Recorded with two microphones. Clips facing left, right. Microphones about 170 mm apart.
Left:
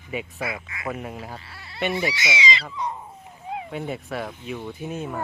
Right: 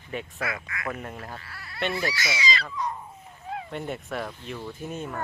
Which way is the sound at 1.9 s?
25° left (ahead or behind).